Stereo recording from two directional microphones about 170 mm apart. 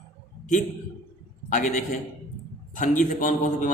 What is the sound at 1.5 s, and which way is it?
A man's voice, 45° left (ahead or behind).